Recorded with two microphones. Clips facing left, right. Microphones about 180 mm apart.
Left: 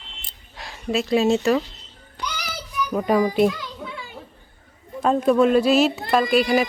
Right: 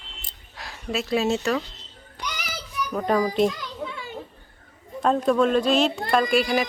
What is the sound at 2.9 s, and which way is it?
Speech, 10° left (ahead or behind).